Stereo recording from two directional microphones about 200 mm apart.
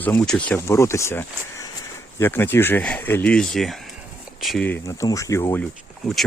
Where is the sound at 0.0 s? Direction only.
5° left (ahead or behind).